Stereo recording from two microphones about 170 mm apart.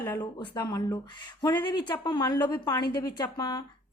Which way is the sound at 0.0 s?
20° left (ahead or behind).